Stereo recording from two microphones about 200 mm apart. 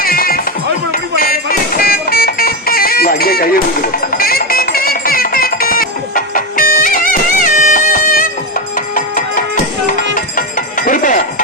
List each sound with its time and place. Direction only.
0.0 s music: 45° left (ahead or behind)